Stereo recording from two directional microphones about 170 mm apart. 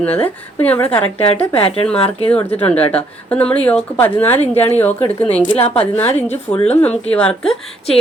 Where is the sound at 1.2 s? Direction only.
35° left (ahead or behind).